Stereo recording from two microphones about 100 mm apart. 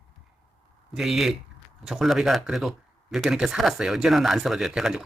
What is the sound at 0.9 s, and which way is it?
Speech, 5° right (ahead or behind).